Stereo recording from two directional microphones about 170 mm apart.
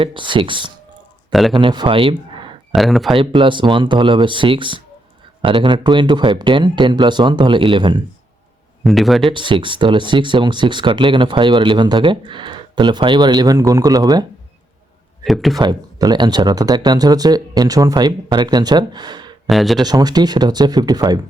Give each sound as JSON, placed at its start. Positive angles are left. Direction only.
{"t": 0.0, "sound": "speech", "side_deg": -30}
{"t": 1.3, "sound": "a man's voice", "side_deg": 0}
{"t": 1.5, "sound": "speech", "side_deg": -25}
{"t": 2.7, "sound": "speech", "side_deg": 0}
{"t": 3.2, "sound": "speech", "side_deg": -30}
{"t": 8.8, "sound": "speech", "side_deg": 0}
{"t": 9.3, "sound": "speech", "side_deg": -30}
{"t": 15.2, "sound": "speech", "side_deg": 0}
{"t": 15.5, "sound": "speech", "side_deg": -20}
{"t": 19.5, "sound": "speech", "side_deg": 0}
{"t": 19.8, "sound": "speech", "side_deg": -25}